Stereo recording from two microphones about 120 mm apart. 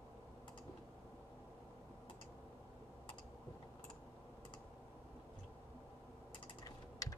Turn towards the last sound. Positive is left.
turn(degrees=30)  # may be behind; listen again after turning